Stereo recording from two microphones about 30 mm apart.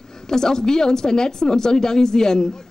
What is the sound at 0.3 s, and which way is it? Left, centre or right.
A woman's voice, centre.